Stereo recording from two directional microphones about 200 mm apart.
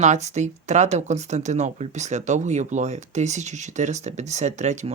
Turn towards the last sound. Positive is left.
turn(degrees=-35)  # may be behind; listen again after turning